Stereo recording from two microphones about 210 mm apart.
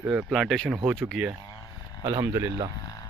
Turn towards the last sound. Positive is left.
turn(degrees=15)  # may be behind; listen again after turning